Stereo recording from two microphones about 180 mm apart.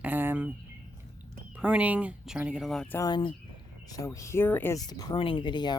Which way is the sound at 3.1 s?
25° left (ahead or behind).